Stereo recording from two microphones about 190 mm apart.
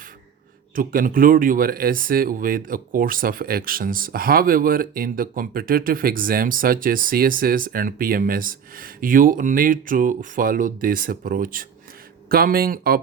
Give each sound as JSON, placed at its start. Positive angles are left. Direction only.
{"t": 0.8, "sound": "speech", "side_deg": -45}